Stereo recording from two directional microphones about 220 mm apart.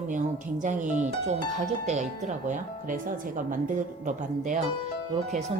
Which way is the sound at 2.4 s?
35° right (ahead or behind).